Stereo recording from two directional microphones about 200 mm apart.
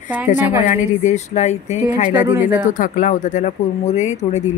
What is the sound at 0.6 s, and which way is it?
Speech, 35° left (ahead or behind).